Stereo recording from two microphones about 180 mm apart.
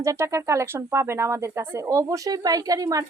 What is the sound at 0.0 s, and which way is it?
Speech, 15° right (ahead or behind).